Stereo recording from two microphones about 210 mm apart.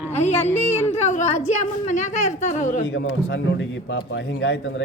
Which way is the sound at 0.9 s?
35° left (ahead or behind).